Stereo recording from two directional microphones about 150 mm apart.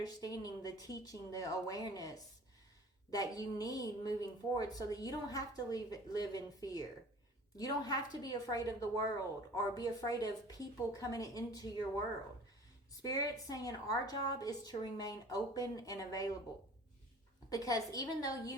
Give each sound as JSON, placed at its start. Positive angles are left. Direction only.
{"t": 0.0, "sound": "a woman's voice", "side_deg": 25}
{"t": 13.0, "sound": "a woman's voice", "side_deg": 25}
{"t": 17.5, "sound": "a woman's voice", "side_deg": 25}